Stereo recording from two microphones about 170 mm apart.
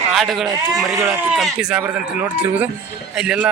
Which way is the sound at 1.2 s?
5° right (ahead or behind).